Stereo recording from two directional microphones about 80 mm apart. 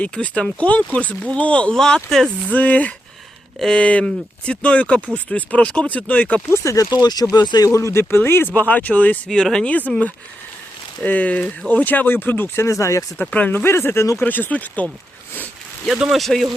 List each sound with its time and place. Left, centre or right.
0.0 s speech: centre
2.5 s speech: centre
6.5 s speech: left
6.9 s speech: left
7.7 s speech: left; by 9.7 s centre
11.0 s speech: centre
12.6 s speech: left
13.1 s speech: left
14.2 s speech: left
15.9 s speech: centre